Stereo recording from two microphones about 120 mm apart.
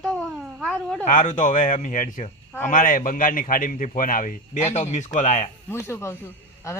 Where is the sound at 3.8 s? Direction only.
90° left.